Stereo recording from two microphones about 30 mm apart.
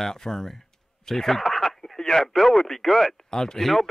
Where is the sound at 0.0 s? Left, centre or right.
Centre.